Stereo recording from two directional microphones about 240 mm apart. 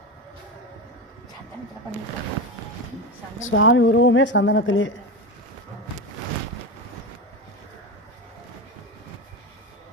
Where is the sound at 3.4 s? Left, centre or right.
Left.